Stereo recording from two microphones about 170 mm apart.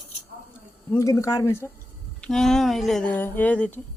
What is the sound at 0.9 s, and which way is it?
Speech, 20° left (ahead or behind).